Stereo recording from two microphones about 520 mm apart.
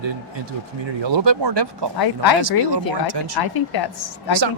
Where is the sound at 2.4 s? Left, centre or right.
Right.